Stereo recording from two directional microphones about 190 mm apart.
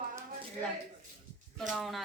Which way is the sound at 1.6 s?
Centre (ahead or behind).